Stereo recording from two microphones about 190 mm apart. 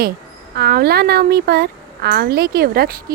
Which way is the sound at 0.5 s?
55° right (ahead or behind).